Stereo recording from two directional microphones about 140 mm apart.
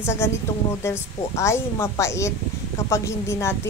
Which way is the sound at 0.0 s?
20° left (ahead or behind).